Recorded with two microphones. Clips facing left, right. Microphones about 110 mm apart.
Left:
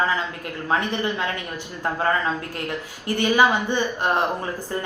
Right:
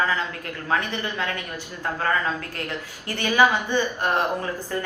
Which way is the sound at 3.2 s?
20° left (ahead or behind).